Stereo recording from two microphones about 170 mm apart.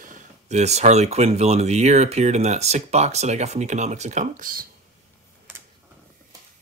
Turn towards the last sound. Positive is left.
turn(degrees=-55)  # may be behind; listen again after turning